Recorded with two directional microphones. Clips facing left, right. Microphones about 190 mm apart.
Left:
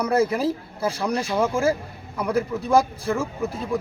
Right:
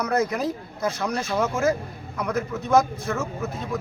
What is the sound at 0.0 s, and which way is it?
A man's voice, 30° left (ahead or behind).